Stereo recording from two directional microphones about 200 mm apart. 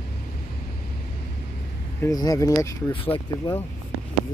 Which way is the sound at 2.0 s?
20° left (ahead or behind).